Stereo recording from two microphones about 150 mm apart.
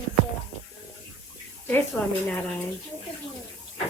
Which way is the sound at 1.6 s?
15° left (ahead or behind).